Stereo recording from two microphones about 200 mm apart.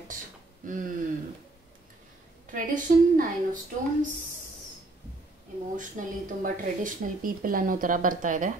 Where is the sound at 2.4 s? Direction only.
40° right (ahead or behind).